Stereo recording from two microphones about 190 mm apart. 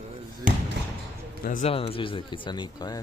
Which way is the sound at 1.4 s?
45° left (ahead or behind).